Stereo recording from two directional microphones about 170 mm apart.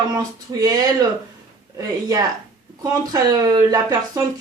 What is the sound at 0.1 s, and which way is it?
Speech, 20° right (ahead or behind).